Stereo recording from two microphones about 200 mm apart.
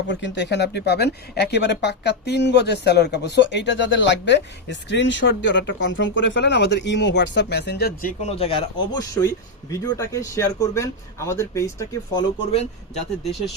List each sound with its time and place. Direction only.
0.1 s speech: 60° left (ahead or behind)
8.2 s speech: 30° left (ahead or behind); by 12.2 s 15° left (ahead or behind)
12.5 s speech: 30° left (ahead or behind)